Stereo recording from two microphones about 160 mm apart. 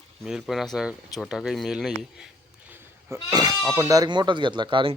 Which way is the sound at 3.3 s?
25° right (ahead or behind).